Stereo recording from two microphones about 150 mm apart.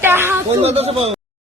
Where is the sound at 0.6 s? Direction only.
45° right (ahead or behind).